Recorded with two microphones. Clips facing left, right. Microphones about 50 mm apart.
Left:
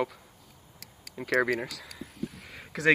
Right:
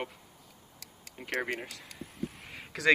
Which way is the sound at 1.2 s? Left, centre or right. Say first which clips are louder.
Left 8 dB; left.